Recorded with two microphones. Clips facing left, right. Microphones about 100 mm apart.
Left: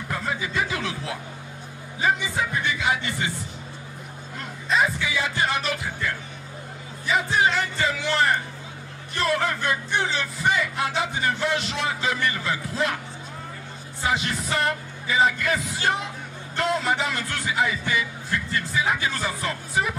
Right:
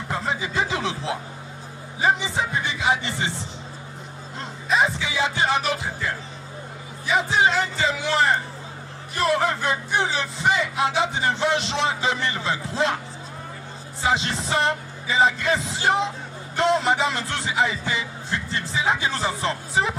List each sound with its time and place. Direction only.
0.1 s a sound: 25° right (ahead or behind)
2.0 s music: 25° right (ahead or behind)
4.7 s music: 25° right (ahead or behind)
7.3 s music: 25° right (ahead or behind)
14.0 s music: 25° right (ahead or behind)